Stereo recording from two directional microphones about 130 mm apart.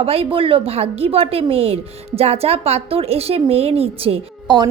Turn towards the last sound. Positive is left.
turn(degrees=-45)  # may be behind; listen again after turning